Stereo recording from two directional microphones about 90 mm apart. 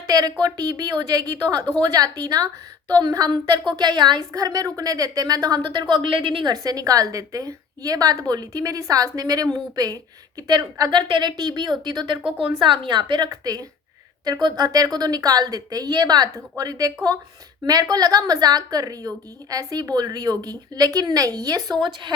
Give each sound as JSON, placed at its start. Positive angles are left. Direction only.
{"t": 0.1, "sound": "a woman's voice", "side_deg": -45}
{"t": 4.3, "sound": "a woman's voice", "side_deg": -40}
{"t": 6.5, "sound": "a woman's voice", "side_deg": -40}
{"t": 12.5, "sound": "a woman's voice", "side_deg": -65}
{"t": 13.3, "sound": "a woman's voice", "side_deg": -45}